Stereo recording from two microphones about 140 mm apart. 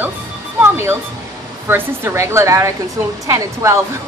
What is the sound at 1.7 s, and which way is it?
Speech, 20° right (ahead or behind).